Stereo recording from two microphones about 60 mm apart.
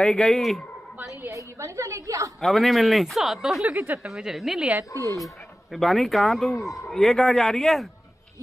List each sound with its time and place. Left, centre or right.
0.0 s speech: centre
1.3 s a woman's voice: right
2.4 s speech: centre
3.7 s a woman's voice: right
4.0 s speech: centre